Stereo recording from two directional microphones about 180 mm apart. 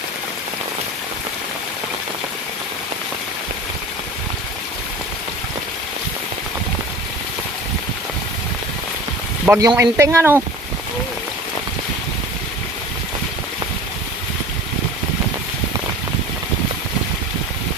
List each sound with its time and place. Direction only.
9.5 s speech: 15° right (ahead or behind)